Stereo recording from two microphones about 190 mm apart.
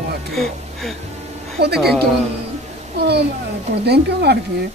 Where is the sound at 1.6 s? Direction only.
55° right (ahead or behind).